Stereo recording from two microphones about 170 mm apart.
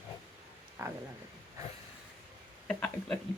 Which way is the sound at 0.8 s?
20° right (ahead or behind).